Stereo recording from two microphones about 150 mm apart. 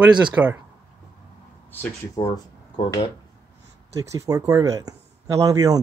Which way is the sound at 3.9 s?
20° right (ahead or behind).